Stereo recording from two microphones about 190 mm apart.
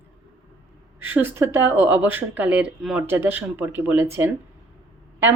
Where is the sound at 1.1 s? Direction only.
10° right (ahead or behind).